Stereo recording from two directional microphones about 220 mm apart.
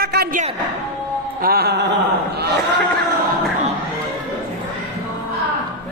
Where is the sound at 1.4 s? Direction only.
45° right (ahead or behind).